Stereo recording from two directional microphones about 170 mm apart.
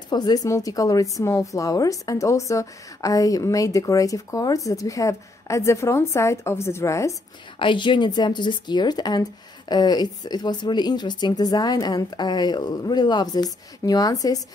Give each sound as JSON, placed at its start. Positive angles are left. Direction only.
{"t": 0.1, "sound": "a woman's voice", "side_deg": 25}
{"t": 7.5, "sound": "a woman's voice", "side_deg": 30}